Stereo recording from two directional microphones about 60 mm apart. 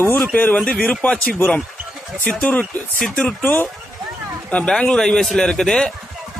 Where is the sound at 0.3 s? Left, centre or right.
Left.